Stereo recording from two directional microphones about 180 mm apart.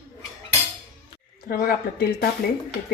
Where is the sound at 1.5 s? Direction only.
55° left (ahead or behind).